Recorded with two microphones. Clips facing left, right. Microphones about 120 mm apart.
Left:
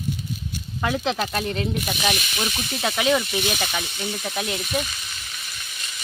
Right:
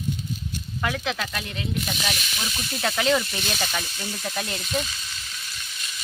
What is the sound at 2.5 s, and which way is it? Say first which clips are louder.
Speech: right 1 dB; 10° left (ahead or behind).